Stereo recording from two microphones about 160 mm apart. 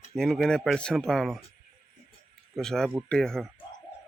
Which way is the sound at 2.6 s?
Centre (ahead or behind).